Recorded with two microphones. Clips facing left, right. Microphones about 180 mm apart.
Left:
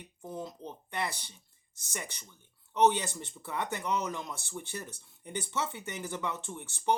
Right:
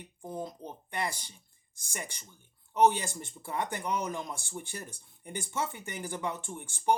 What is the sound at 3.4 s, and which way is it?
Speech, 50° right (ahead or behind).